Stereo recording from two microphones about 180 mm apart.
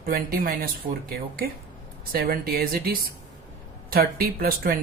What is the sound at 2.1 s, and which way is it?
A man's voice, 55° right (ahead or behind).